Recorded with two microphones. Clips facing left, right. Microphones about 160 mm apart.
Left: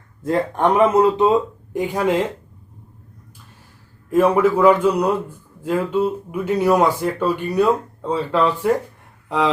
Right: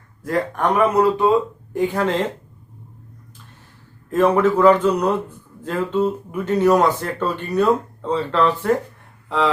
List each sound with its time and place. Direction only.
0.2 s speech: 25° left (ahead or behind)
4.1 s speech: 10° left (ahead or behind)